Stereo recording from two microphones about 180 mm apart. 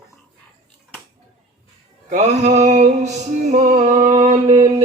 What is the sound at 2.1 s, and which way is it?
Music, 40° right (ahead or behind).